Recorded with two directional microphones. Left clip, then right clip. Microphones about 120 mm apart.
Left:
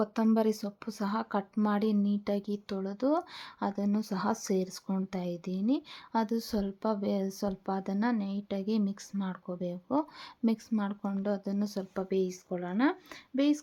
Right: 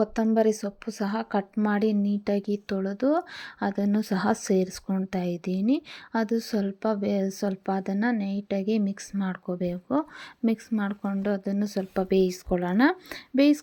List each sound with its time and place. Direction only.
0.3 s speech: 15° right (ahead or behind)
12.0 s speech: 40° right (ahead or behind)